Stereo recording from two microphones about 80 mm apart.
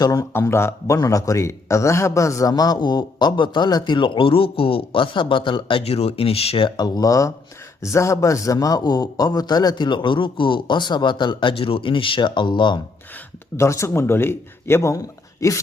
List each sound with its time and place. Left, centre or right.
0.0 s speech: left
0.3 s speech: left
0.9 s speech: left
2.7 s a man's voice: left
6.6 s speech: left
8.5 s a man's voice: left
13.6 s speech: left